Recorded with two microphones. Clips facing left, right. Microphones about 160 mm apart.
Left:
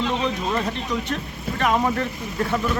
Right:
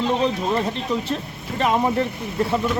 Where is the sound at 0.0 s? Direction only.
35° right (ahead or behind).